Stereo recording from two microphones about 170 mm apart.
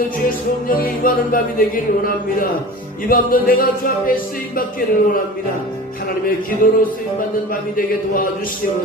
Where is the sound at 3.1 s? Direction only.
55° left (ahead or behind).